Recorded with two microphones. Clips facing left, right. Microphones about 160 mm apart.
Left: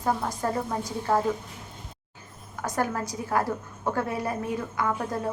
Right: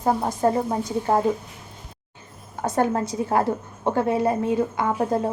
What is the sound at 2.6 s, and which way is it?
A woman's voice, 25° right (ahead or behind).